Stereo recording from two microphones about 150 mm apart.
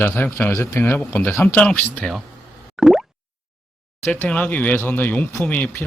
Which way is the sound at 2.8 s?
Centre (ahead or behind).